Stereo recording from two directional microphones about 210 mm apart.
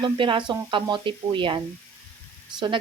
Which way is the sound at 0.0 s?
25° right (ahead or behind).